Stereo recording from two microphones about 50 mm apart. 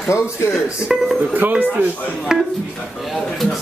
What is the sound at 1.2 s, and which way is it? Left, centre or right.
Speech, right.